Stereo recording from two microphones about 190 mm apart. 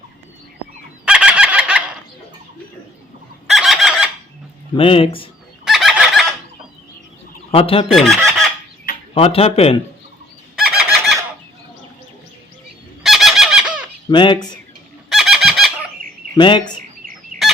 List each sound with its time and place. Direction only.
1.0 s fowl: 5° right (ahead or behind)
3.5 s fowl: centre (ahead or behind)
4.8 s a man's voice: 30° left (ahead or behind)
5.6 s fowl: centre (ahead or behind)
7.5 s speech: 30° left (ahead or behind)
7.9 s speech: centre (ahead or behind)
9.1 s speech: 30° left (ahead or behind)
10.5 s fowl: centre (ahead or behind)
13.0 s fowl: centre (ahead or behind)
14.1 s a man's voice: 25° left (ahead or behind)
15.1 s a sound: centre (ahead or behind)
16.4 s a man's voice: 25° left (ahead or behind)
17.4 s a sound: centre (ahead or behind)